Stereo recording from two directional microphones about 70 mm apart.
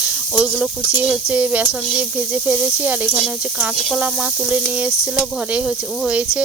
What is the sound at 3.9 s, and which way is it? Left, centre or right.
Sizzle, centre.